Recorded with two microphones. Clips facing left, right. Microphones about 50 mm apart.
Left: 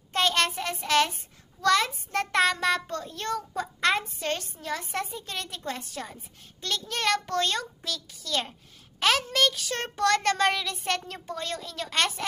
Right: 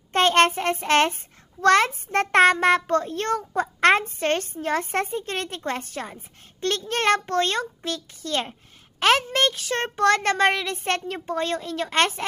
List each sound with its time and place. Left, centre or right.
0.1 s a child's voice: right